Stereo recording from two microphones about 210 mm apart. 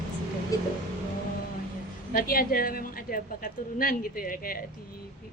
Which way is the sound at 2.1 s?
45° left (ahead or behind).